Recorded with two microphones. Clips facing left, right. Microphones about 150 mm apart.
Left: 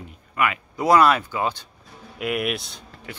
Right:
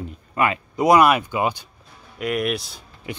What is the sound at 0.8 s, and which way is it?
Speech, 15° right (ahead or behind).